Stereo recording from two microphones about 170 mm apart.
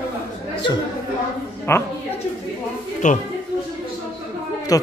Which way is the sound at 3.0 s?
45° left (ahead or behind).